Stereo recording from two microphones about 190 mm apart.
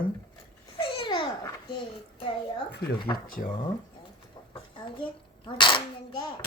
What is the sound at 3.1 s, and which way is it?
Speech, 50° left (ahead or behind).